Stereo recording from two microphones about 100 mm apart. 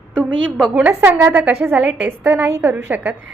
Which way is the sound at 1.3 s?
10° right (ahead or behind).